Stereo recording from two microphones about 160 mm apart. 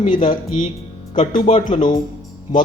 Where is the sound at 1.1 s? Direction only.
45° left (ahead or behind).